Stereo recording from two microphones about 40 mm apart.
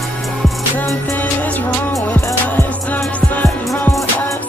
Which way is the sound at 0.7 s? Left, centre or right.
Left.